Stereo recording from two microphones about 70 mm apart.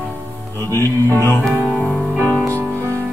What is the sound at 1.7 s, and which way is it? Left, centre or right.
Music, centre.